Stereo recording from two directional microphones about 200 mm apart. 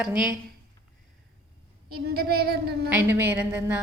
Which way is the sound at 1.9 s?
50° right (ahead or behind).